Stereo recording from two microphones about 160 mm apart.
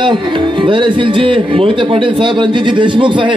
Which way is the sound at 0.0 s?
30° right (ahead or behind).